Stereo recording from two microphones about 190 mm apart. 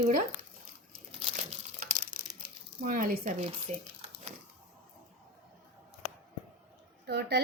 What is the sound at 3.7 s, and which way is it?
Speech, 35° right (ahead or behind).